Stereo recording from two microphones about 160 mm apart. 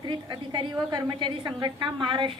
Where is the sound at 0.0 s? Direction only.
30° right (ahead or behind).